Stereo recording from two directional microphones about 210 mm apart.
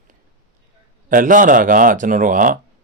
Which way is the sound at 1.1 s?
40° right (ahead or behind).